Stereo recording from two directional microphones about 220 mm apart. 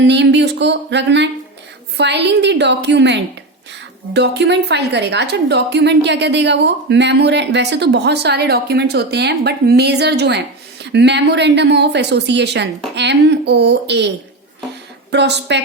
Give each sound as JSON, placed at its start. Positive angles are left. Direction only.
{"t": 0.0, "sound": "a woman's voice", "side_deg": -50}
{"t": 15.1, "sound": "a woman's voice", "side_deg": -50}